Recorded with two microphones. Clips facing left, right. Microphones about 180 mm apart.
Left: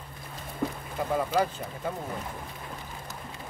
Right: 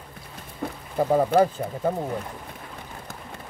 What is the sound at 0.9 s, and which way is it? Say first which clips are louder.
Speech: right 8 dB; 45° right (ahead or behind).